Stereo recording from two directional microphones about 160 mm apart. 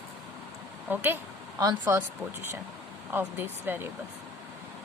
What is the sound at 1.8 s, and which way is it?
Speech, 10° right (ahead or behind).